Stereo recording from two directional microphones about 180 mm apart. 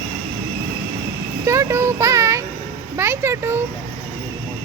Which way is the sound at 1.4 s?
15° right (ahead or behind).